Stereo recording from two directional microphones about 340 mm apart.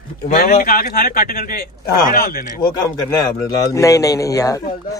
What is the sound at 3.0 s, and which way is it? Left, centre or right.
Speech, centre.